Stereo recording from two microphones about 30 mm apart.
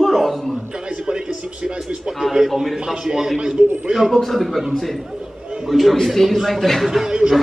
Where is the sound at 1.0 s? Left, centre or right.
Right.